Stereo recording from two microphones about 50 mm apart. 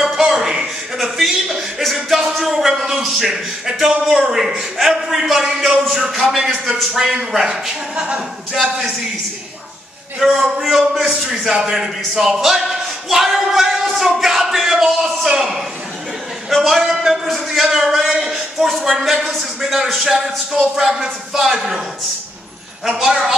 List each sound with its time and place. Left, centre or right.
0.0 s a sound: centre
5.6 s a man's voice: centre
10.2 s a man's voice: centre
22.8 s speech: centre